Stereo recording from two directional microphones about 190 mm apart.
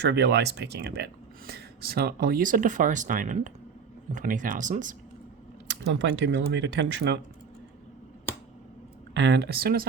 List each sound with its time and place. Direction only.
0.0 s speech: 65° right (ahead or behind); by 4.9 s 45° right (ahead or behind)
5.8 s speech: 70° right (ahead or behind)
9.1 s speech: 65° right (ahead or behind)